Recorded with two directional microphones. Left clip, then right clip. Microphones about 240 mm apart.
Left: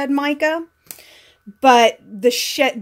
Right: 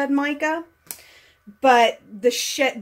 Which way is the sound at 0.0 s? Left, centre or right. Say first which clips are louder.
Left 3 dB; left.